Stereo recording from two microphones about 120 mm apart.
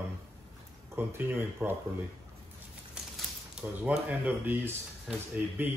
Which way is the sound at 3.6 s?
10° right (ahead or behind).